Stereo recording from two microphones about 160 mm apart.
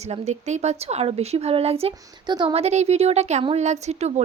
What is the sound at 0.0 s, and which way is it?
A woman's voice, 45° right (ahead or behind).